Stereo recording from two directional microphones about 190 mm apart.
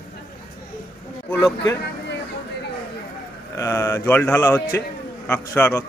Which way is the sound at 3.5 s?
15° left (ahead or behind).